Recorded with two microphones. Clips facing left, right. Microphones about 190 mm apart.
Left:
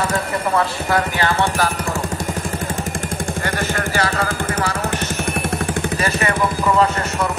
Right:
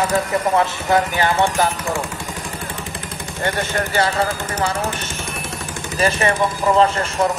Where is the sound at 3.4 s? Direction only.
25° right (ahead or behind).